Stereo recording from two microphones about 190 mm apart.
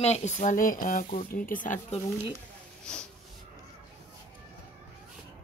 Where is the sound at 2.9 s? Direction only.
5° left (ahead or behind).